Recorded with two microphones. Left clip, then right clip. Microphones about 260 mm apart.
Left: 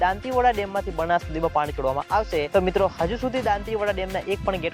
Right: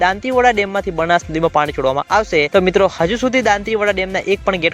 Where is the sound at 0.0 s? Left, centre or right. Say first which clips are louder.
Right 7 dB; right.